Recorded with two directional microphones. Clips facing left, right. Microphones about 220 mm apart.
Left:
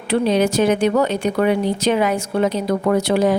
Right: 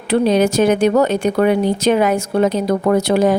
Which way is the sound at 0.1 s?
45° right (ahead or behind).